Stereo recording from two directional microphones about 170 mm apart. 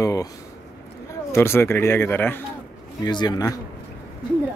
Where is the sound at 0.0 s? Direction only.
20° left (ahead or behind).